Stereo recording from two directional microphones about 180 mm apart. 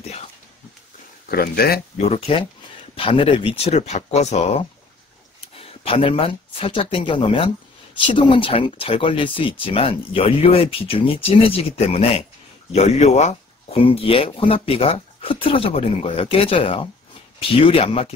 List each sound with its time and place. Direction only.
1.3 s speech: 60° left (ahead or behind)
2.0 s speech: 35° left (ahead or behind)